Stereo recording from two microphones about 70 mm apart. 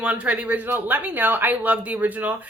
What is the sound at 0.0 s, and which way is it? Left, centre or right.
A woman's voice, right.